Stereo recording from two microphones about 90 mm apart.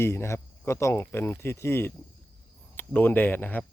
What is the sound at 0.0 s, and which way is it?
Speech, 30° left (ahead or behind).